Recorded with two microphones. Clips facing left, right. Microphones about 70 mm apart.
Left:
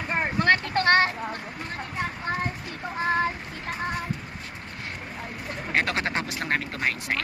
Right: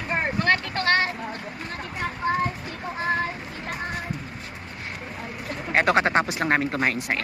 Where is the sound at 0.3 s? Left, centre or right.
Left.